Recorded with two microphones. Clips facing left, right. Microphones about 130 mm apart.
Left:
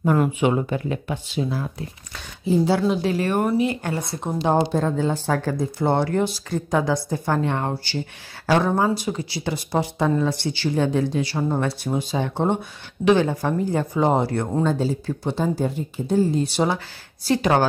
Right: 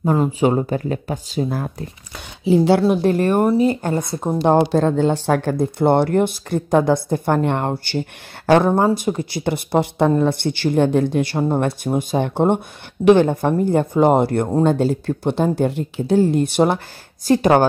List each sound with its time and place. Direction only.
0.0 s speech: 30° right (ahead or behind)
2.4 s a woman's voice: 70° right (ahead or behind)
2.9 s speech: 50° right (ahead or behind)
3.4 s speech: 35° right (ahead or behind)
4.4 s speech: 60° right (ahead or behind)